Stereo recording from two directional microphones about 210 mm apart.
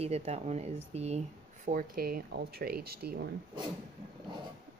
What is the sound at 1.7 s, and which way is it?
Speech, 45° right (ahead or behind).